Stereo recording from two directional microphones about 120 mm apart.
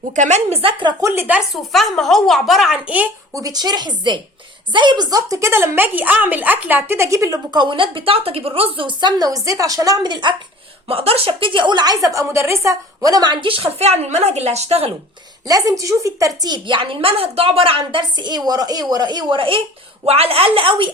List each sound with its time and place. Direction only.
0.2 s a woman's voice: 70° right (ahead or behind)
1.0 s speech: 20° right (ahead or behind)
1.4 s speech: centre (ahead or behind)
3.3 s a woman's voice: 30° right (ahead or behind)
7.5 s a woman's voice: 40° right (ahead or behind)
10.8 s a woman's voice: 55° right (ahead or behind)
15.4 s a woman's voice: 30° right (ahead or behind)
20.1 s speech: 55° right (ahead or behind)